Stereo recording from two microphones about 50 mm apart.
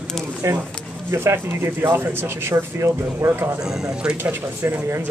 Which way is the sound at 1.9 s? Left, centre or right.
Right.